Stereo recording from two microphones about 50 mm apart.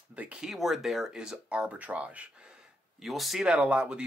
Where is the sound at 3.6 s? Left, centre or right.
Right.